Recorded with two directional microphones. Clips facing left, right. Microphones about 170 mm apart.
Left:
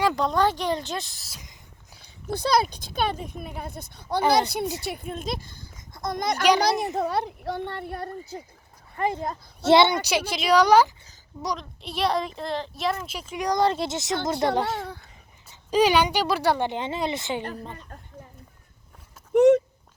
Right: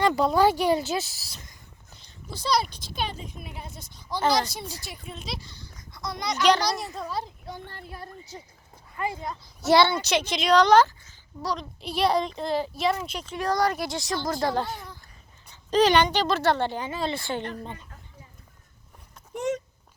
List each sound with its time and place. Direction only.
0.0 s speech: 5° right (ahead or behind)
1.4 s a sound: 10° left (ahead or behind)
2.3 s a child's voice: 55° left (ahead or behind)
9.0 s speech: 45° left (ahead or behind)
9.6 s speech: 25° left (ahead or behind)
11.5 s a child's voice: centre (ahead or behind); by 14.6 s 20° left (ahead or behind)
14.6 s a child's voice: 80° left
15.7 s speech: 10° left (ahead or behind)
17.6 s speech: centre (ahead or behind)
17.8 s a sound: 55° left (ahead or behind)
19.3 s speech: 60° left (ahead or behind)